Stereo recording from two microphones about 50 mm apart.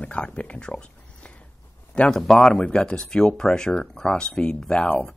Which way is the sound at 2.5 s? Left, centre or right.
Left.